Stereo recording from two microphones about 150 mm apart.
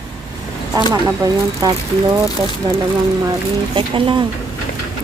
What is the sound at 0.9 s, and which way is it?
Speech, 25° right (ahead or behind).